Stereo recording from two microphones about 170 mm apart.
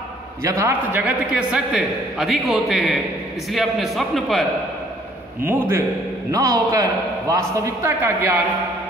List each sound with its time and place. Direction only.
0.4 s a man's voice: 15° right (ahead or behind); by 4.5 s centre (ahead or behind)
5.4 s a man's voice: 15° right (ahead or behind)